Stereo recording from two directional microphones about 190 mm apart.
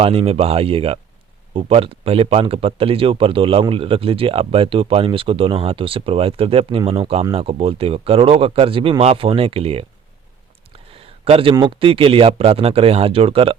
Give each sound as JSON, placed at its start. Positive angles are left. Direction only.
{"t": 0.0, "sound": "speech", "side_deg": -30}
{"t": 10.9, "sound": "speech", "side_deg": -30}